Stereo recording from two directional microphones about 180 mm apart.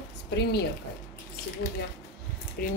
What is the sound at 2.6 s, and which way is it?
Speech, 55° left (ahead or behind).